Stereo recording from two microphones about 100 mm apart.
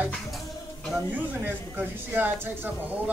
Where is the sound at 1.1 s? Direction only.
20° right (ahead or behind).